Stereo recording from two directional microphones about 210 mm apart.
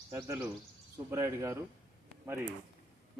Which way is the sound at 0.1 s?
10° right (ahead or behind).